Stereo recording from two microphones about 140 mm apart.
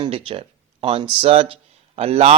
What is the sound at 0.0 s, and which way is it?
Speech, 40° right (ahead or behind).